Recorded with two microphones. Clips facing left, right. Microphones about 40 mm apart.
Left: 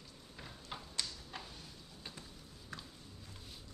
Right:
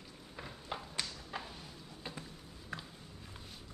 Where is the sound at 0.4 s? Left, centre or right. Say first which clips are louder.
Right 5 dB; centre.